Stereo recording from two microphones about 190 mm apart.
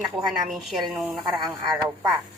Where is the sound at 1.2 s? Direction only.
25° right (ahead or behind).